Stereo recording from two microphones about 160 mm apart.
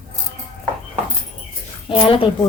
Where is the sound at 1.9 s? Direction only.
35° left (ahead or behind).